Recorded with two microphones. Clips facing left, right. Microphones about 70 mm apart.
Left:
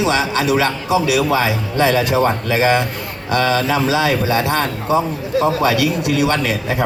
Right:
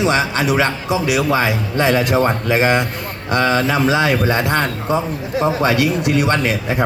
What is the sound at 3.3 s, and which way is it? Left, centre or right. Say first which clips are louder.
A man's voice: even; right.